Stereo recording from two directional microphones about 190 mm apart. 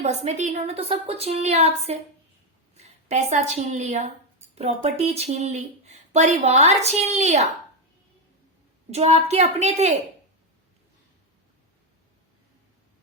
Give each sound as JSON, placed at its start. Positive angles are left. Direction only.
{"t": 0.0, "sound": "a woman's voice", "side_deg": -35}
{"t": 8.9, "sound": "speech", "side_deg": -35}